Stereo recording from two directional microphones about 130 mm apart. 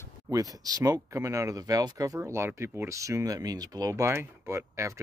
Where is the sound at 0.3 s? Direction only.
30° right (ahead or behind).